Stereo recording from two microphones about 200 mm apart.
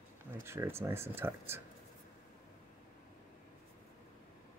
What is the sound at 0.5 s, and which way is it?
Speech, 10° right (ahead or behind).